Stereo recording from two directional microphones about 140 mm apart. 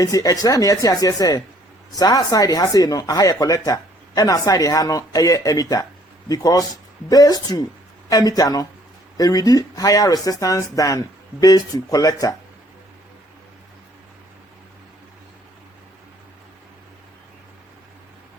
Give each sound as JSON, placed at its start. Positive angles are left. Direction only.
{"t": 0.0, "sound": "speech", "side_deg": 25}